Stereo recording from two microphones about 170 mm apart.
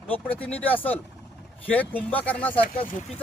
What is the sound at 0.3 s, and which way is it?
Speech, 10° left (ahead or behind).